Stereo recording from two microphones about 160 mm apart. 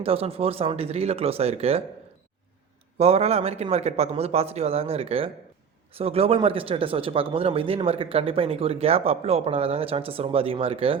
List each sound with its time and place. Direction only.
0.0 s speech: 40° right (ahead or behind)
3.0 s speech: 40° right (ahead or behind)